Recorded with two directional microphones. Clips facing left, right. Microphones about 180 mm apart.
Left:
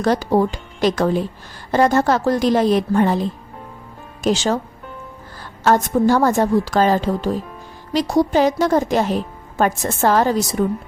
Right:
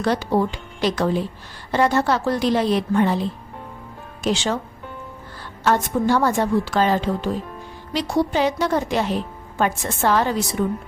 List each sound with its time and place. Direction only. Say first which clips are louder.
0.0 s a woman's voice: left 3 dB; 40° left (ahead or behind)